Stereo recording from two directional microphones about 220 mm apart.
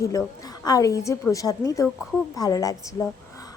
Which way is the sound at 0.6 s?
15° left (ahead or behind).